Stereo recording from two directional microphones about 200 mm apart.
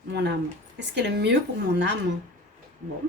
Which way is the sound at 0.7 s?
60° right (ahead or behind).